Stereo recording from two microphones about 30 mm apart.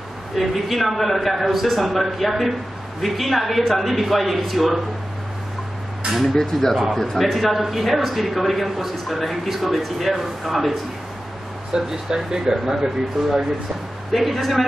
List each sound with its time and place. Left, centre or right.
0.4 s a man's voice: centre
6.3 s speech: centre
7.0 s a man's voice: centre
11.7 s speech: right
14.1 s a man's voice: centre